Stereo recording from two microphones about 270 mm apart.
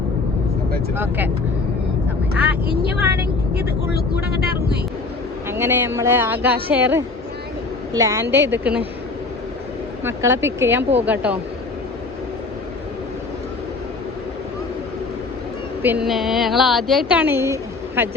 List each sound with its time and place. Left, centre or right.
0.9 s speech: centre
3.5 s speech: right
5.5 s speech: centre
10.0 s speech: centre
15.8 s a woman's voice: centre